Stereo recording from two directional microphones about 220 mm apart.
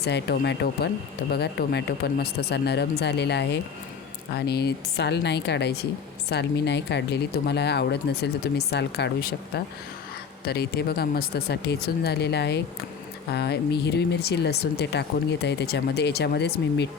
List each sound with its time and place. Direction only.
0.0 s speech: 50° left (ahead or behind)
10.4 s speech: 45° left (ahead or behind)